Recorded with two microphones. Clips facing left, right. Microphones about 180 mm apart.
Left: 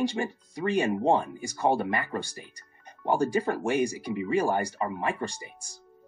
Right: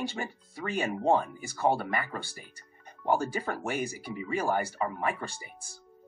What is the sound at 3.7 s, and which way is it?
Speech, 15° left (ahead or behind).